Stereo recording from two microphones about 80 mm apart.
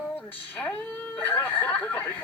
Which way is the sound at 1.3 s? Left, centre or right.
Left.